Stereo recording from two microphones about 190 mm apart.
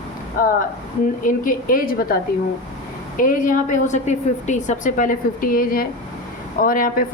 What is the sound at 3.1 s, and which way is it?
A woman's voice, 45° left (ahead or behind).